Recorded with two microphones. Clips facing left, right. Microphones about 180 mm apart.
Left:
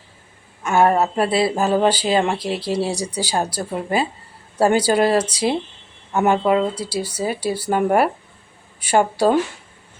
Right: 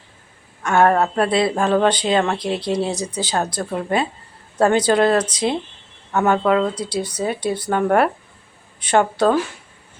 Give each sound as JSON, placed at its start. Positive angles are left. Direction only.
{"t": 0.6, "sound": "a woman's voice", "side_deg": 10}
{"t": 2.9, "sound": "speech", "side_deg": 35}
{"t": 3.2, "sound": "speech", "side_deg": 10}